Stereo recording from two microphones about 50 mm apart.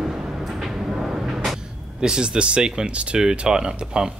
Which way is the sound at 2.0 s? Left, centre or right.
Centre.